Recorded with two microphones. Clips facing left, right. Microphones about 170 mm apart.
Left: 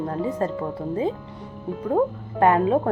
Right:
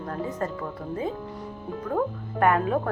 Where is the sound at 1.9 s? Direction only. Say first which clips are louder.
Left 5 dB; 25° left (ahead or behind).